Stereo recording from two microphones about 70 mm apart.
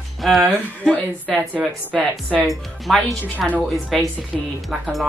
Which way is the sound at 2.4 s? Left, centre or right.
Centre.